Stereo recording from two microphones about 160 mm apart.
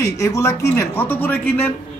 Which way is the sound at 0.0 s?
20° left (ahead or behind).